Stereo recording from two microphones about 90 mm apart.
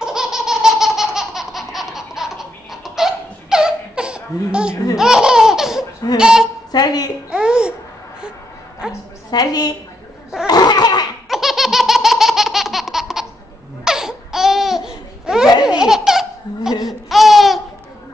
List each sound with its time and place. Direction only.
0.0 s laughter: 5° right (ahead or behind)
6.1 s speech: 10° right (ahead or behind)
6.7 s a woman's voice: 45° left (ahead or behind)
7.2 s babbling: 10° right (ahead or behind)
9.3 s a woman's voice: 45° left (ahead or behind)
10.4 s laughter: 50° left (ahead or behind)
11.2 s laughter: 5° right (ahead or behind)